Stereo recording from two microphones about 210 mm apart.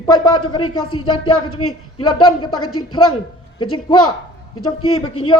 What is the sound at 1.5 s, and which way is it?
A man's voice, 90° left.